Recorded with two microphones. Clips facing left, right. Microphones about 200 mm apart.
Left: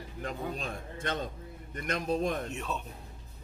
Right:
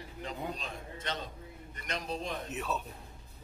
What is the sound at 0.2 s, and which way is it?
A man's voice, 50° left (ahead or behind).